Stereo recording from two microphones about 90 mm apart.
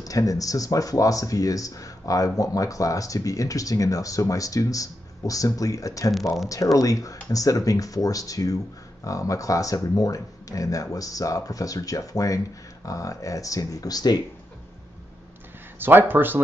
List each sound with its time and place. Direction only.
0.0 s speech: 40° left (ahead or behind)
15.8 s speech: 20° right (ahead or behind)